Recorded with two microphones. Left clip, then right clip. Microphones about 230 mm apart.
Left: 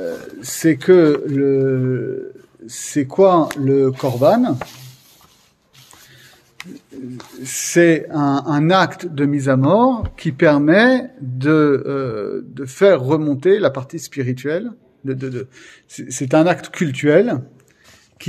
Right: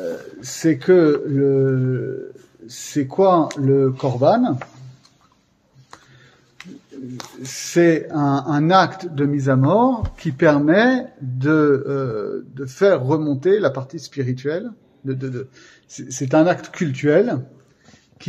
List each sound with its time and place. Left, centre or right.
0.4 s a man's voice: left
6.6 s a sound: left
7.4 s a man's voice: left